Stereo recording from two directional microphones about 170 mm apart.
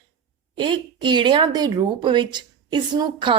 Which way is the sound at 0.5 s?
30° right (ahead or behind).